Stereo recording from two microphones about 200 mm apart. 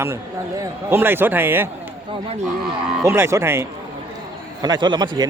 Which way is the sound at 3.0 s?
15° right (ahead or behind).